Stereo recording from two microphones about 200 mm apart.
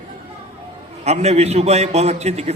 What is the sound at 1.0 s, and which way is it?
A man's voice, 35° right (ahead or behind).